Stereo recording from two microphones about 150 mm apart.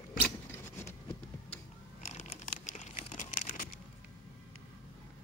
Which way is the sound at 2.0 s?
50° left (ahead or behind).